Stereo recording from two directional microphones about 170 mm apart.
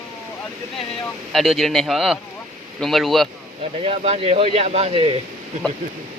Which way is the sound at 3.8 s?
35° right (ahead or behind).